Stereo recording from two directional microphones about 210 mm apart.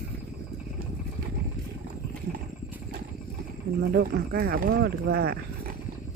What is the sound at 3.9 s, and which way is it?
Speech, 50° right (ahead or behind).